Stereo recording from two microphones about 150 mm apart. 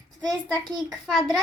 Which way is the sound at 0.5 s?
Centre (ahead or behind).